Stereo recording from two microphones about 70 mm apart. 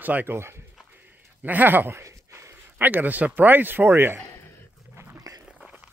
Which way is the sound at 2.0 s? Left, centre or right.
Right.